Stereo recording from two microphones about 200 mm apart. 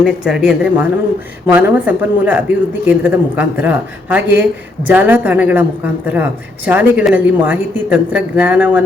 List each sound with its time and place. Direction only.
0.0 s a woman's voice: 5° right (ahead or behind)